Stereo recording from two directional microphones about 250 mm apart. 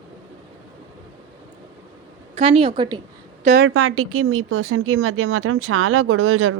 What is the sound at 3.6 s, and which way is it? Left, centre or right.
Speech, right.